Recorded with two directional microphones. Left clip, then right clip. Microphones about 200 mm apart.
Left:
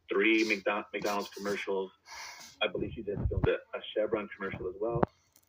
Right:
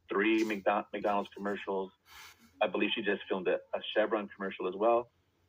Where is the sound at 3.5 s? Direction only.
20° right (ahead or behind).